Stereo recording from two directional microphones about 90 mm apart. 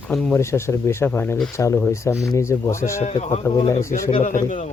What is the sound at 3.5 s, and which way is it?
Speech, 45° left (ahead or behind).